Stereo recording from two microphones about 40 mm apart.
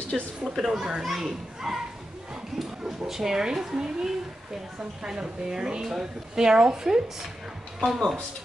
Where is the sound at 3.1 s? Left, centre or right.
Centre.